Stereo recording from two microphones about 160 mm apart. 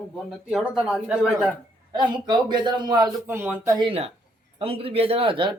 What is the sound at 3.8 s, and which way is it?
A man's voice, 35° right (ahead or behind).